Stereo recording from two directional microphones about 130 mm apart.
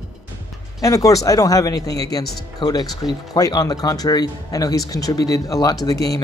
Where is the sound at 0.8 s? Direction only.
25° left (ahead or behind).